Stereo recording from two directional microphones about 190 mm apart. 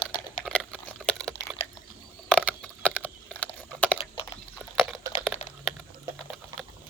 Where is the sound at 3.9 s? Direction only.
30° left (ahead or behind).